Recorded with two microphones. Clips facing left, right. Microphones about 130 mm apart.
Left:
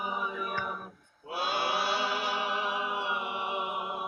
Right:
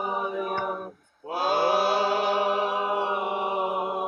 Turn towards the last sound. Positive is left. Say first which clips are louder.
# right 7 dB
turn(degrees=-40)  # may be behind; listen again after turning